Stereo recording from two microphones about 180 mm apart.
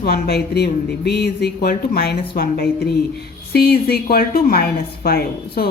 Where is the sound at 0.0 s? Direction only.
60° left (ahead or behind).